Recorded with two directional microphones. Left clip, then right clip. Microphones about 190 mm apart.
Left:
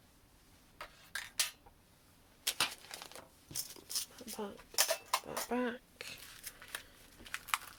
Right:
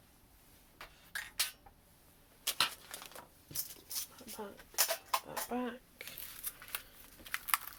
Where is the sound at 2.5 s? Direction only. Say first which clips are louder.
Right 2 dB; 30° left (ahead or behind).